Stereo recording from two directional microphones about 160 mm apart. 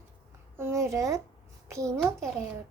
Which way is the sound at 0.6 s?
20° right (ahead or behind).